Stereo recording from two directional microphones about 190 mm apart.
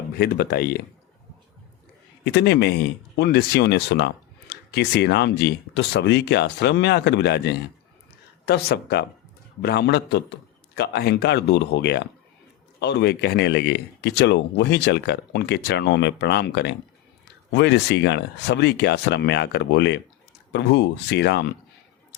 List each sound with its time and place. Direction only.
0.2 s speech: 55° left (ahead or behind)
2.2 s speech: 60° left (ahead or behind)